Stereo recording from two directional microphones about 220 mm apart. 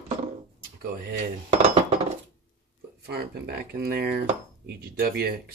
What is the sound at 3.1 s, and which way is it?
Speech, 45° right (ahead or behind).